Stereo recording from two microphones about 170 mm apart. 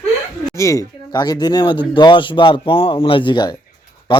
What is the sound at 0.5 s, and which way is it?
Speech, 20° left (ahead or behind).